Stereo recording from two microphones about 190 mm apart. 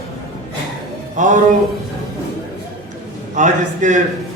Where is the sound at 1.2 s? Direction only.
40° right (ahead or behind).